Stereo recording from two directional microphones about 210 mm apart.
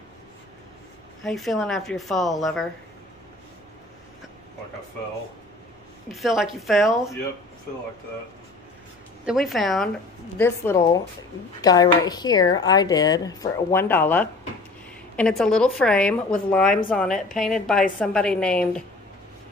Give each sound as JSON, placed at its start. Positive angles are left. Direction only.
{"t": 1.2, "sound": "a woman's voice", "side_deg": 0}
{"t": 6.1, "sound": "a woman's voice", "side_deg": 0}
{"t": 9.2, "sound": "a woman's voice", "side_deg": 0}
{"t": 10.3, "sound": "a woman's voice", "side_deg": 10}